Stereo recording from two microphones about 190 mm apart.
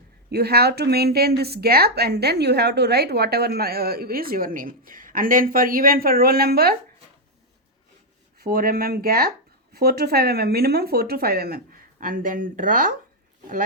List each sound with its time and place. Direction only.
0.3 s a woman's voice: 55° right (ahead or behind)
8.4 s speech: 50° right (ahead or behind)